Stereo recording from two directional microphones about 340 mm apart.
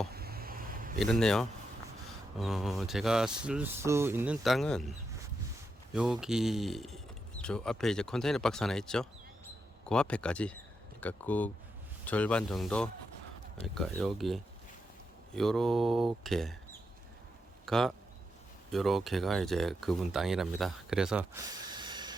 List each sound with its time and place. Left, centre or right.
0.1 s vehicle: right
0.9 s speech: centre
5.9 s speech: centre
17.7 s a man's voice: centre